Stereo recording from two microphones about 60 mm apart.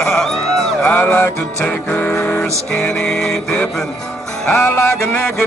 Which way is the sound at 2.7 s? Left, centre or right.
Centre.